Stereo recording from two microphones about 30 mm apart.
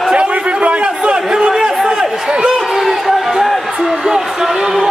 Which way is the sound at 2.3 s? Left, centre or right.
Right.